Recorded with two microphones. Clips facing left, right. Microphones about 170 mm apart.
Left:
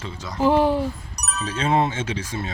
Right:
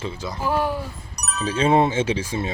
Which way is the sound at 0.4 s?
20° left (ahead or behind).